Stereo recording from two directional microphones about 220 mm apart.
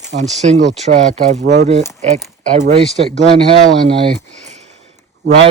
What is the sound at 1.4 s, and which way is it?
Speech, 50° right (ahead or behind).